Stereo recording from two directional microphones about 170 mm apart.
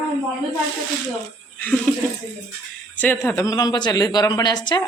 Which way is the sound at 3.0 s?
10° left (ahead or behind).